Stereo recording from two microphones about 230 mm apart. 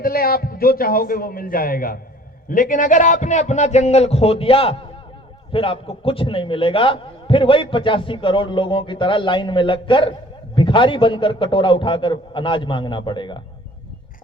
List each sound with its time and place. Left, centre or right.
0.0 s a man's voice: left